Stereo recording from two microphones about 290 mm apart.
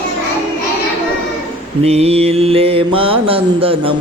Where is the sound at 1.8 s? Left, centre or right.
Right.